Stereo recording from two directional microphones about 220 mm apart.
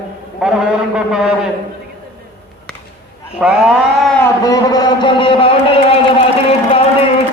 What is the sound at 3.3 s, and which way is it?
Speech, 5° right (ahead or behind).